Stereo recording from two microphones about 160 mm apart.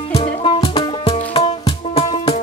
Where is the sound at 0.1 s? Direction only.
35° left (ahead or behind).